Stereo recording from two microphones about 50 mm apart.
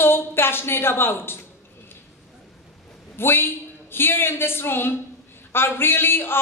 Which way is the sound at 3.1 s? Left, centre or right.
Left.